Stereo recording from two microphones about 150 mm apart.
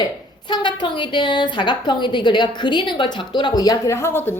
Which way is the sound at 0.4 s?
30° left (ahead or behind).